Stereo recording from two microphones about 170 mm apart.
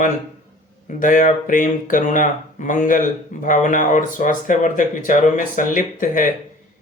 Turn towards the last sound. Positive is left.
turn(degrees=50)  # may be behind; listen again after turning